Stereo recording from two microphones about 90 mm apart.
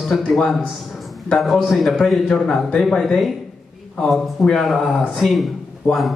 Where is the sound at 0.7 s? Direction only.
Centre (ahead or behind).